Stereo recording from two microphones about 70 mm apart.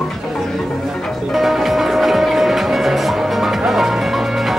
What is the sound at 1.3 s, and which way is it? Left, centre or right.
Music, centre.